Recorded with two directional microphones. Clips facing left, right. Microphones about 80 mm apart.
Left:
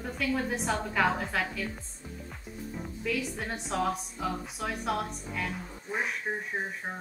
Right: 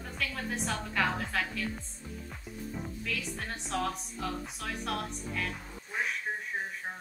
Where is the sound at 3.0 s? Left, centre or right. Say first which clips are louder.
Left 8 dB; centre.